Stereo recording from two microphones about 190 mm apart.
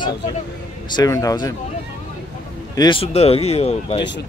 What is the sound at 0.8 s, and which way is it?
Speech, 20° left (ahead or behind).